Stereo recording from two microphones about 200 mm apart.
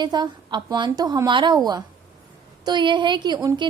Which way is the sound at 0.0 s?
20° right (ahead or behind).